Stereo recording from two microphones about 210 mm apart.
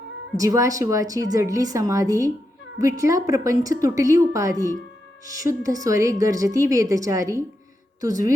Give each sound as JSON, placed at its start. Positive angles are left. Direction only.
{"t": 0.3, "sound": "a woman's voice", "side_deg": -15}